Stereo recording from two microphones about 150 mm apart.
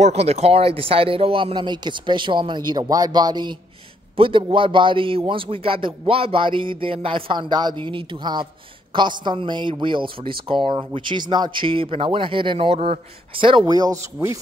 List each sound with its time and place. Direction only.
0.0 s a man's voice: 45° right (ahead or behind); by 14.4 s 25° right (ahead or behind)